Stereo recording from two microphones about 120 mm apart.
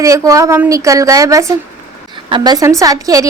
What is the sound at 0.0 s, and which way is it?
A woman's voice, 25° right (ahead or behind).